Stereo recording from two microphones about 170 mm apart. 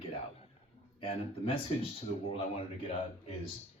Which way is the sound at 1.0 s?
35° left (ahead or behind).